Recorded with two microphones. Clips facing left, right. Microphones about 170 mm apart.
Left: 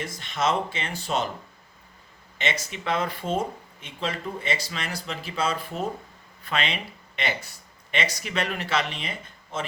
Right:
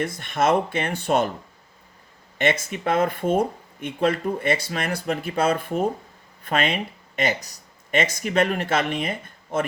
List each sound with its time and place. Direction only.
0.0 s speech: 55° right (ahead or behind)
2.4 s speech: 55° right (ahead or behind)